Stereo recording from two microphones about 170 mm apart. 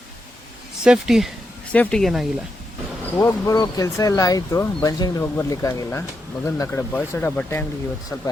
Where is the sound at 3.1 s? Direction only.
15° left (ahead or behind).